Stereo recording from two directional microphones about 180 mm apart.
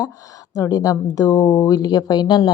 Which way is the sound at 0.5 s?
20° left (ahead or behind).